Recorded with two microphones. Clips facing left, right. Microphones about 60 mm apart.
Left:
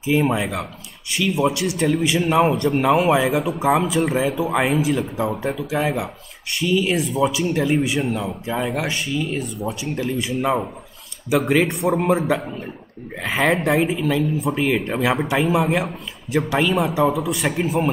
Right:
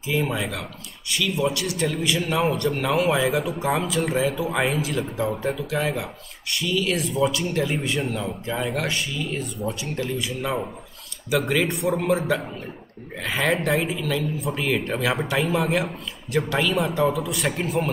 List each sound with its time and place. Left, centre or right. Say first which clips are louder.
0.1 s a man's voice: left 6 dB; centre
3.3 s a man's voice: left 4 dB; centre
5.2 s a man's voice: left 2 dB; centre
7.1 s a man's voice: left 3 dB; centre
11.2 s a man's voice: left 4 dB; left
13.3 s speech: left 4 dB; centre
13.6 s a man's voice: left 4 dB; left; by 17.9 s centre